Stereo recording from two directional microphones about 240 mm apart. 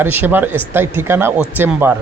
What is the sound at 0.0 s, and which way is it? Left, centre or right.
Speech, centre.